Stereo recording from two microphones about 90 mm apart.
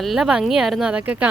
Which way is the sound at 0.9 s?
15° right (ahead or behind).